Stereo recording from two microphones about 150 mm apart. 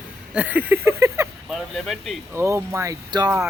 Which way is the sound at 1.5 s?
Centre (ahead or behind).